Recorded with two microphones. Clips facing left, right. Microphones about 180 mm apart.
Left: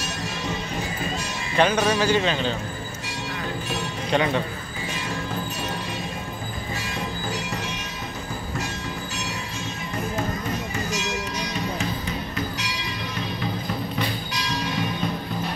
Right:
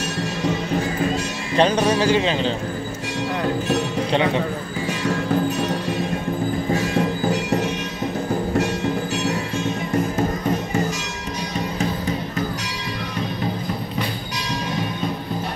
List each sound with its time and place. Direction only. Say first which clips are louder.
1.6 s a man's voice: right 3 dB; 30° right (ahead or behind)